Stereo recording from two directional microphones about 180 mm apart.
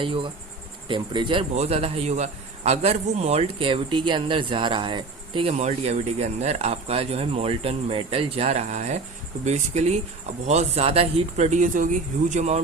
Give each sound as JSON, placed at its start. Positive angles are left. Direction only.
{"t": 0.0, "sound": "insect", "side_deg": -30}
{"t": 0.9, "sound": "a man's voice", "side_deg": -25}